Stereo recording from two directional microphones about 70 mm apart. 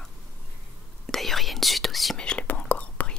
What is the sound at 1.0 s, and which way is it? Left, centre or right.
Whispering, centre.